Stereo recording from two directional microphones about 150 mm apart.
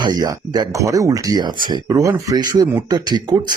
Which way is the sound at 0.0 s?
25° right (ahead or behind).